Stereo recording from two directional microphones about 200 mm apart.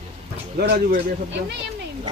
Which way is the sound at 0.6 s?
60° right (ahead or behind).